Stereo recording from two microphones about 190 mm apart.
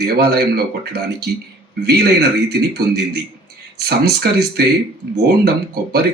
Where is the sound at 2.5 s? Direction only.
55° right (ahead or behind).